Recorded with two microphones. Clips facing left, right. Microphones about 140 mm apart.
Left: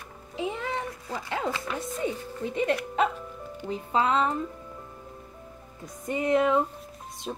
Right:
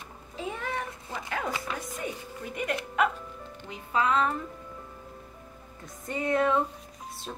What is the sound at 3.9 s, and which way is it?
Speech, 25° left (ahead or behind).